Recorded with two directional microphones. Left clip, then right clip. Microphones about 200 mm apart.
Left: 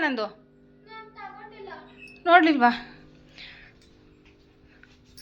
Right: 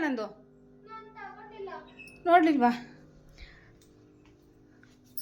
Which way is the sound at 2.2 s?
5° right (ahead or behind).